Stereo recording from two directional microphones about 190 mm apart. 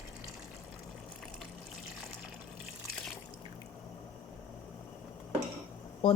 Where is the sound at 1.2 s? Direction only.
Centre (ahead or behind).